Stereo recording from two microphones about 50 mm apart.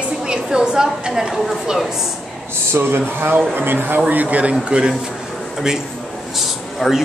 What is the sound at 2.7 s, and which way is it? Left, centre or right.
Speech, right.